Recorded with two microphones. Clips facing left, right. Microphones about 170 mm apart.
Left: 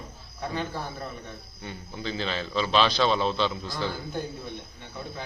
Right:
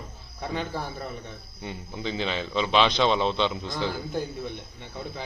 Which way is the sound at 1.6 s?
20° right (ahead or behind).